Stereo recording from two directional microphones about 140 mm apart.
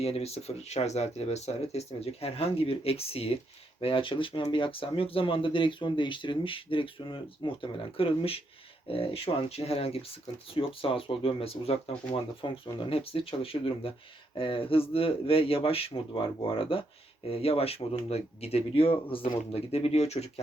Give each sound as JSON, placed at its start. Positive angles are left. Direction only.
{"t": 0.0, "sound": "speech", "side_deg": 45}